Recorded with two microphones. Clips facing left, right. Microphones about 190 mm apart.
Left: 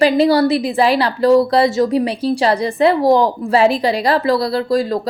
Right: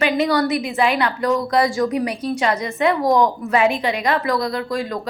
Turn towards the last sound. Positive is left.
turn(degrees=35)  # may be behind; listen again after turning